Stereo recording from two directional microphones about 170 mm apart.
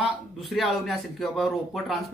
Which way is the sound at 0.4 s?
Centre (ahead or behind).